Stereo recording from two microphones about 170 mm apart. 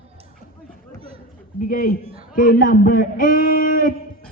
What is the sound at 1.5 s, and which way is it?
A man's voice, 55° left (ahead or behind).